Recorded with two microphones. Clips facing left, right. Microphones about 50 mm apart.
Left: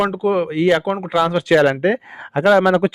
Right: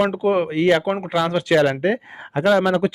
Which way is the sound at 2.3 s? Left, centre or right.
Left.